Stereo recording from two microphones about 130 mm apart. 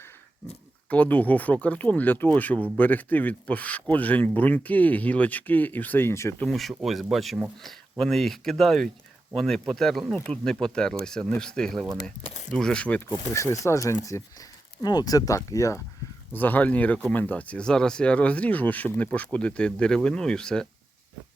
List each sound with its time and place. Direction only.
0.9 s speech: 10° left (ahead or behind)
6.4 s speech: centre (ahead or behind)
13.3 s speech: 25° left (ahead or behind)
16.3 s speech: 15° left (ahead or behind)